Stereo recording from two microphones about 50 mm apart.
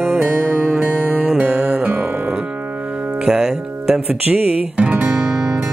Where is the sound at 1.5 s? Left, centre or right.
Centre.